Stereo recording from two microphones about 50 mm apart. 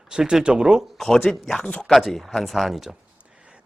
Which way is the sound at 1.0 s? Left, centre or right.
Centre.